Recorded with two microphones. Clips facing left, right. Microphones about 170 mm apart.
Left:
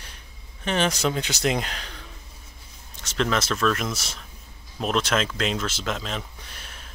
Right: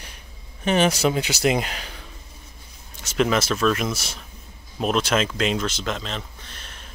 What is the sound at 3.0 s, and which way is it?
Speech, 10° right (ahead or behind).